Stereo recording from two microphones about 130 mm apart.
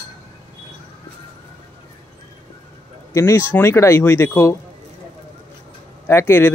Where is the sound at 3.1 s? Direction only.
20° left (ahead or behind).